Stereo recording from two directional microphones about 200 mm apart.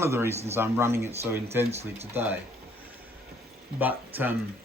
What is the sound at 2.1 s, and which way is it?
Speech, 10° right (ahead or behind).